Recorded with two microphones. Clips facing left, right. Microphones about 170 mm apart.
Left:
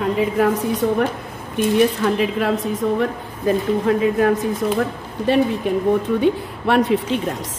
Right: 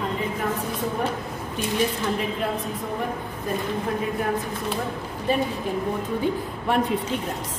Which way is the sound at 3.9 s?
90° left.